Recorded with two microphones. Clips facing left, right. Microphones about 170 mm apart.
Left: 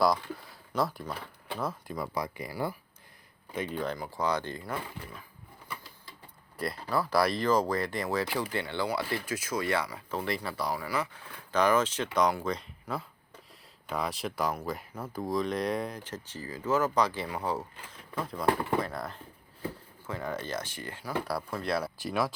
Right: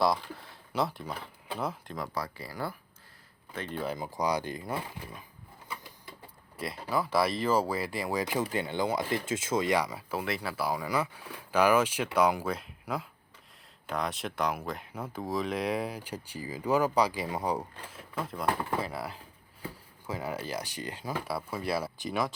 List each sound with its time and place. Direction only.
0.7 s speech: 5° right (ahead or behind)
1.9 s speech: 10° left (ahead or behind)
3.7 s speech: 5° right (ahead or behind)
3.9 s speech: 20° right (ahead or behind)
6.6 s speech: 5° right (ahead or behind)
10.8 s speech: 15° right (ahead or behind)
13.8 s speech: centre (ahead or behind); by 21.2 s 20° right (ahead or behind)
21.2 s speech: 5° right (ahead or behind)